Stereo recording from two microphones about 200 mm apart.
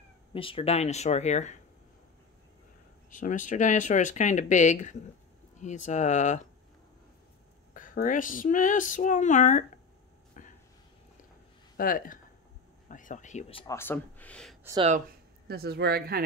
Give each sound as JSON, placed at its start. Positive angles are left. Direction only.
{"t": 0.3, "sound": "speech", "side_deg": 25}
{"t": 3.1, "sound": "speech", "side_deg": 40}
{"t": 7.7, "sound": "speech", "side_deg": 40}
{"t": 10.4, "sound": "vehicle", "side_deg": 40}
{"t": 11.7, "sound": "speech", "side_deg": 45}
{"t": 13.7, "sound": "speech", "side_deg": 10}
{"t": 15.4, "sound": "speech", "side_deg": -50}